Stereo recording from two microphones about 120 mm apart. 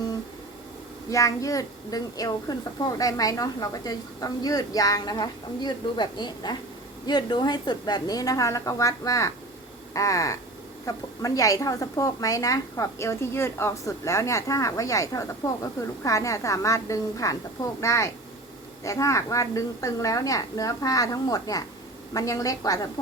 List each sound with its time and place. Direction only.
1.1 s a woman's voice: 25° left (ahead or behind)